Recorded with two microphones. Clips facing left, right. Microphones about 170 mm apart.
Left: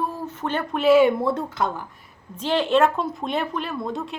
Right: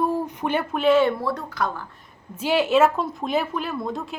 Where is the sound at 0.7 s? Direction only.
5° left (ahead or behind); by 1.8 s 25° left (ahead or behind).